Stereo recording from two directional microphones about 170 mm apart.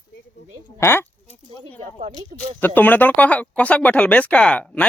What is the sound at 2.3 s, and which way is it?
Speech, 55° right (ahead or behind).